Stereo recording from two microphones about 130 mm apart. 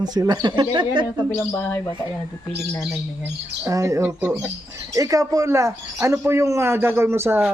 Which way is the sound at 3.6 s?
25° right (ahead or behind).